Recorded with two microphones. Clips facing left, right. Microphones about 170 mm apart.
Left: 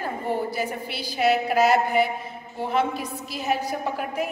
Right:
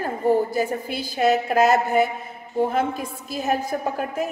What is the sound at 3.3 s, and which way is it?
Speech, 45° right (ahead or behind).